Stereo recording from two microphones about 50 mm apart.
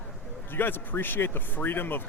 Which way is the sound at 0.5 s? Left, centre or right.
Left.